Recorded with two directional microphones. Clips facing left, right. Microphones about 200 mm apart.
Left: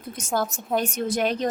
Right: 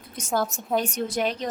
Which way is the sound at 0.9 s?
50° left (ahead or behind).